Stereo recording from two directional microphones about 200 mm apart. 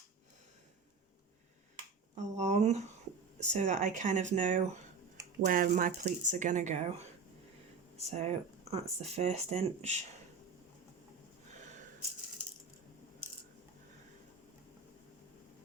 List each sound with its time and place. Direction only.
2.1 s speech: 35° right (ahead or behind)